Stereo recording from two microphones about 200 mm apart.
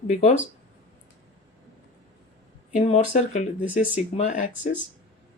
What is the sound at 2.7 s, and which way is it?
Speech, 35° left (ahead or behind).